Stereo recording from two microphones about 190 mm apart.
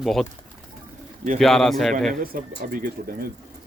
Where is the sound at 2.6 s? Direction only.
45° right (ahead or behind).